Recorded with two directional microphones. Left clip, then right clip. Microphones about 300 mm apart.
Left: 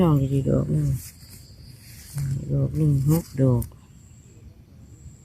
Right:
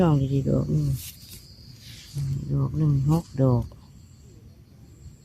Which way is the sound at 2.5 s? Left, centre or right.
Centre.